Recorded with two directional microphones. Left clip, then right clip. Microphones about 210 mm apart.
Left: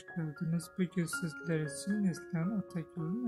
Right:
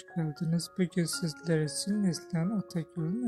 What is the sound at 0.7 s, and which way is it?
Speech, 25° right (ahead or behind).